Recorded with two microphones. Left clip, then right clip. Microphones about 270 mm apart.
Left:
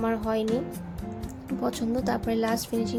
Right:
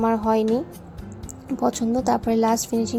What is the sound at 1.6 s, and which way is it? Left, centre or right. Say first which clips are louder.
Speech: right 6 dB; centre.